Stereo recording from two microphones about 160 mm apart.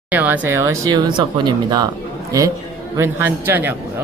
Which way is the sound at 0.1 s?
10° right (ahead or behind).